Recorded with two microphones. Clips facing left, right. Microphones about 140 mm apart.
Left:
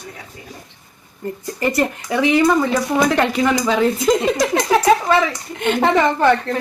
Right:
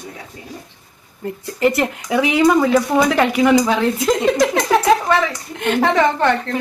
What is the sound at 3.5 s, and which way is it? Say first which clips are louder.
Speech: right 4 dB; 15° right (ahead or behind).